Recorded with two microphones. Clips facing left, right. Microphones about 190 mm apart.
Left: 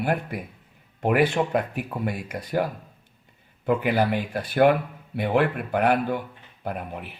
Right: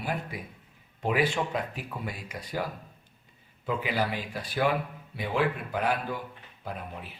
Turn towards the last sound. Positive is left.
turn(degrees=60)  # may be behind; listen again after turning